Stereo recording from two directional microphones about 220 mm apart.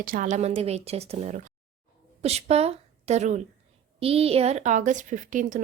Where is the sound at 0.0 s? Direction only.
40° right (ahead or behind).